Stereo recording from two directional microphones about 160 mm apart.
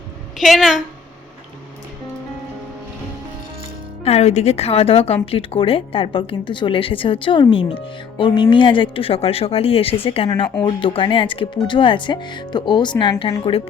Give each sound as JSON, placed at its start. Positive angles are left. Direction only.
{"t": 0.3, "sound": "a woman's voice", "side_deg": 0}
{"t": 4.0, "sound": "speech", "side_deg": 40}